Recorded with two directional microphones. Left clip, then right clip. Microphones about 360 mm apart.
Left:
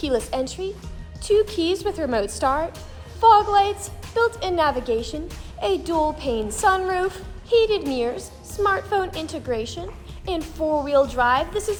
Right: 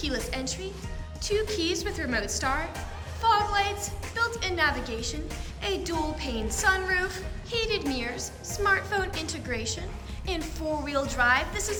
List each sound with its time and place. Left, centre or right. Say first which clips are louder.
0.0 s a woman's voice: left 8 dB; centre